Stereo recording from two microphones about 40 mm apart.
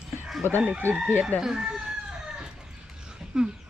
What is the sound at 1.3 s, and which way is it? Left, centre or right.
Speech, left.